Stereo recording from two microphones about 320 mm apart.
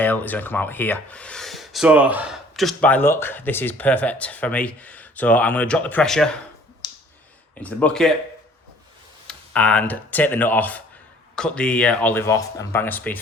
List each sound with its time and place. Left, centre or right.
0.0 s speech: centre
6.8 s clicking: centre
7.5 s speech: centre
9.2 s speech: centre